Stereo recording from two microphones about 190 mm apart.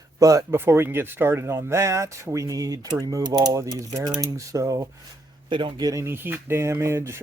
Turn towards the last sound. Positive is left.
turn(degrees=-15)  # may be behind; listen again after turning